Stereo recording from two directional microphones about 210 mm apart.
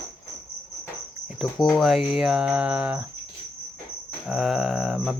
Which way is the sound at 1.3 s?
Centre (ahead or behind).